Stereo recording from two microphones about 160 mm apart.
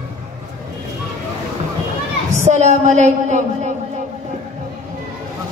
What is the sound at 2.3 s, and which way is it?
A woman's voice, 45° right (ahead or behind).